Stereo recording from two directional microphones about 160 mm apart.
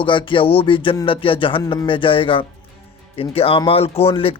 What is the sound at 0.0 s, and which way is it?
Speech, 30° left (ahead or behind).